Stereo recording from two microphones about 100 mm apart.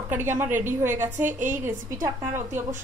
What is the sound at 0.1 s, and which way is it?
A woman's voice, 20° right (ahead or behind).